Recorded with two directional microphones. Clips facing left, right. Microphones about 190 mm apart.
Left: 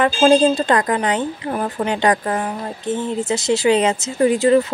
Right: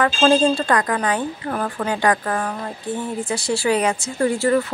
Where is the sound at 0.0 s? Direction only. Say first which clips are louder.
Left 3 dB; 20° left (ahead or behind).